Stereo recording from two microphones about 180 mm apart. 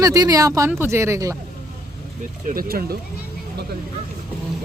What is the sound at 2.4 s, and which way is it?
Speech, 55° right (ahead or behind).